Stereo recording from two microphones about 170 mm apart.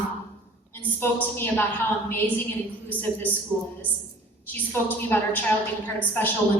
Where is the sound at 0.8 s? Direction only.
15° left (ahead or behind).